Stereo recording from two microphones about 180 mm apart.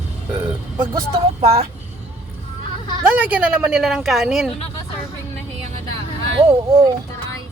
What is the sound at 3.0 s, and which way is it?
A woman's voice, 10° right (ahead or behind).